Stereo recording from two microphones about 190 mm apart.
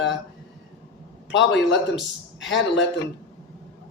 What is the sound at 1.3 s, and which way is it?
Speech, 70° left (ahead or behind).